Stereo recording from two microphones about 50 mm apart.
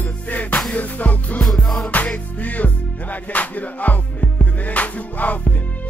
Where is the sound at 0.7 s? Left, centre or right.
Left.